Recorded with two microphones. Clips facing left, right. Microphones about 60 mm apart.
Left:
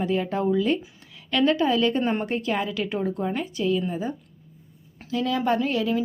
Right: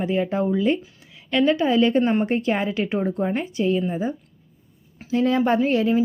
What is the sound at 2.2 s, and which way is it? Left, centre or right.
A woman's voice, right.